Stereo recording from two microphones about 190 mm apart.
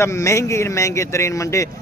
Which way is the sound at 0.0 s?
15° left (ahead or behind).